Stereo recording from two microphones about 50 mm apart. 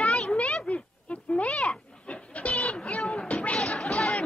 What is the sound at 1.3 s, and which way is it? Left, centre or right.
Speech, left.